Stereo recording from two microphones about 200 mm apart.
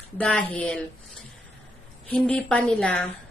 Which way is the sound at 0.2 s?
5° left (ahead or behind).